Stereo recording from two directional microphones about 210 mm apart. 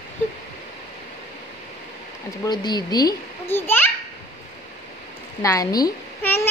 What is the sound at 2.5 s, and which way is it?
A child's voice, 20° left (ahead or behind).